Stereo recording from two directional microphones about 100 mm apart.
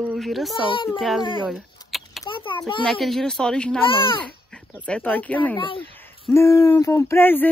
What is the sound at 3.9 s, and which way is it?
Speech, 60° left (ahead or behind).